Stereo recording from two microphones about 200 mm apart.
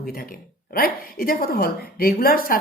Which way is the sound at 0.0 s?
45° left (ahead or behind).